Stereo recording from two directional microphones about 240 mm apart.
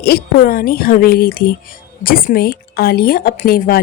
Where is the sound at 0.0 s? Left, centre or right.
Left.